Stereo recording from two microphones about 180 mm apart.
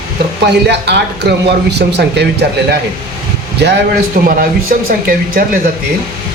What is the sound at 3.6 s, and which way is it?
Speech, 70° right (ahead or behind).